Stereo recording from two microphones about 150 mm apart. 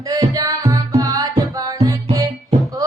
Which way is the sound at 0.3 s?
25° right (ahead or behind).